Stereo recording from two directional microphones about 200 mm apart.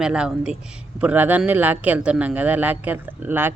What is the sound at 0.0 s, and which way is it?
A man's voice, 5° right (ahead or behind).